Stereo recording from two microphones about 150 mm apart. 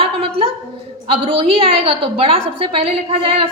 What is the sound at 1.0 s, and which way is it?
A woman's voice, 40° right (ahead or behind).